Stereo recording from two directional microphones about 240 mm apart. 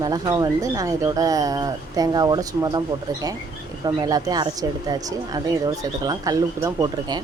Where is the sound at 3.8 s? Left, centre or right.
Centre.